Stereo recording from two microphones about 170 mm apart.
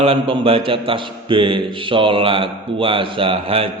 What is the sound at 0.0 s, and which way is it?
A man's voice, 30° right (ahead or behind).